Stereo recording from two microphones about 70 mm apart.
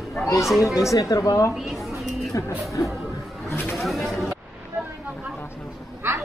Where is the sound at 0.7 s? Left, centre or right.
Left.